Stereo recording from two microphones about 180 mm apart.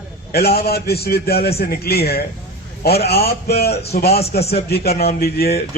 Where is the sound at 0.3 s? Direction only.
60° left (ahead or behind).